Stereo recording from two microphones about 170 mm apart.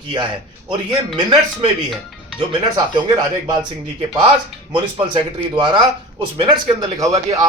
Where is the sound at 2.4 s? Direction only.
25° right (ahead or behind).